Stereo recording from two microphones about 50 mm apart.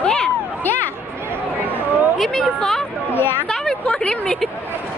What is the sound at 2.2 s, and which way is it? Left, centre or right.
Speech, centre.